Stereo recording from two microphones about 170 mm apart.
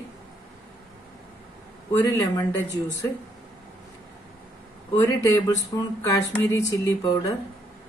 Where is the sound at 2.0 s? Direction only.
25° left (ahead or behind).